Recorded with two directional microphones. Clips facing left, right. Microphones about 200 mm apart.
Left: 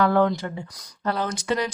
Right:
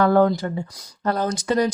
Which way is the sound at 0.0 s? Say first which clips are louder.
Right 3 dB; 40° right (ahead or behind).